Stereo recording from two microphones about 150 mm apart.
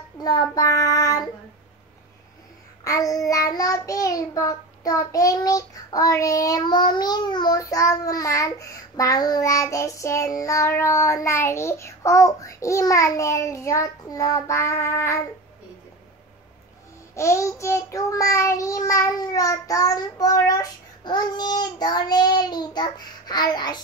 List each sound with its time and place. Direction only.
0.2 s child singing: 25° left (ahead or behind)
2.8 s child singing: 20° left (ahead or behind)
17.1 s child singing: 20° left (ahead or behind)